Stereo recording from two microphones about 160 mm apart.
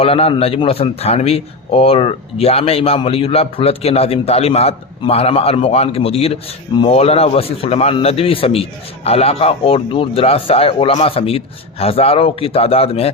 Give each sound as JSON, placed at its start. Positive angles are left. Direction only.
{"t": 0.0, "sound": "a man's voice", "side_deg": 35}